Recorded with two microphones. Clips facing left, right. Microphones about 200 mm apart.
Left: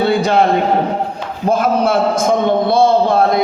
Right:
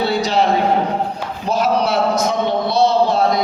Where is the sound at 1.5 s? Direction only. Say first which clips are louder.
Left 3 dB; 50° left (ahead or behind).